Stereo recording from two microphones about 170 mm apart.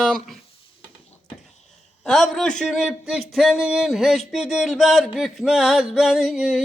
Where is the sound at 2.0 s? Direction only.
Centre (ahead or behind).